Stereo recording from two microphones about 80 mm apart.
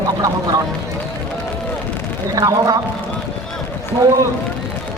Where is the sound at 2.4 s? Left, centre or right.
Right.